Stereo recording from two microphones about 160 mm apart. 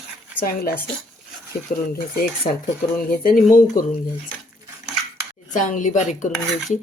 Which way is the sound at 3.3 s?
60° left (ahead or behind).